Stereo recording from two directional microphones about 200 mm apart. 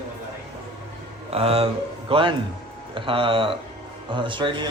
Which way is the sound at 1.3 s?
30° right (ahead or behind).